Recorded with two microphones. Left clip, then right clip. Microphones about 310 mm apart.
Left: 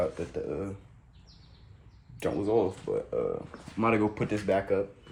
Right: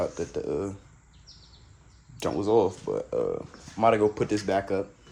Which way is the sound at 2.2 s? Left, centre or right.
Right.